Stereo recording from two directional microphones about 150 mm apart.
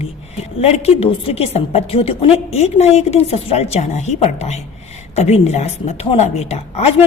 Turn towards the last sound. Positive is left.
turn(degrees=45)  # may be behind; listen again after turning